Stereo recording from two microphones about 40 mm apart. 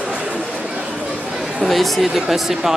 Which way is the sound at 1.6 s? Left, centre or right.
Centre.